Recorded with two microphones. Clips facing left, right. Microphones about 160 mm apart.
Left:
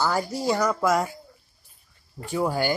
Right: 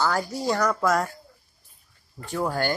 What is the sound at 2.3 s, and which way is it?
Speech, 10° left (ahead or behind).